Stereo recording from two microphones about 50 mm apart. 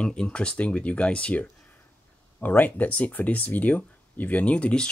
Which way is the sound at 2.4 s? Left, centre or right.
Left.